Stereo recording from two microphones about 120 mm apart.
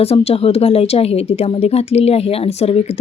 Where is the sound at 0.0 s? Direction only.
55° left (ahead or behind).